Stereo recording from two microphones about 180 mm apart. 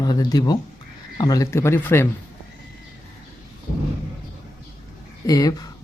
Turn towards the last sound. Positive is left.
turn(degrees=20)  # may be behind; listen again after turning